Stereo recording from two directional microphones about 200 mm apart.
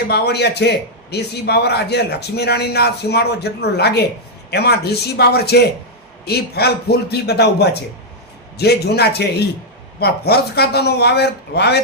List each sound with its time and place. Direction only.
0.1 s a man's voice: 55° left (ahead or behind)